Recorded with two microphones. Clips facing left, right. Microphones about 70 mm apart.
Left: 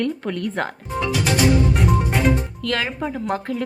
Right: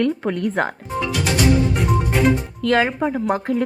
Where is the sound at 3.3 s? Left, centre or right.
Centre.